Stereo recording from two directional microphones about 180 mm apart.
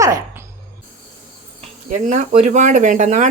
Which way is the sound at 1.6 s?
40° right (ahead or behind).